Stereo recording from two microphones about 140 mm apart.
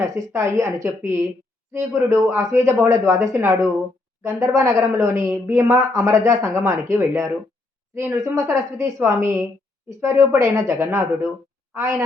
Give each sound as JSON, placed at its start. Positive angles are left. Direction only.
{"t": 0.0, "sound": "a woman's voice", "side_deg": -20}